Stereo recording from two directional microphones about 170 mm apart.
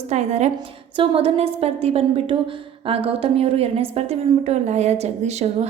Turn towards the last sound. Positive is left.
turn(degrees=-40)  # may be behind; listen again after turning